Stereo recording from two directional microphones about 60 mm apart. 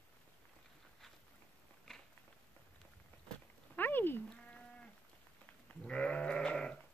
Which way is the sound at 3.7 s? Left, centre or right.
Left.